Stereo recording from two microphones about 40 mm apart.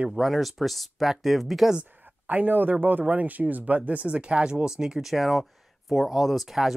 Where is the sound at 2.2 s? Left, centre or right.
Right.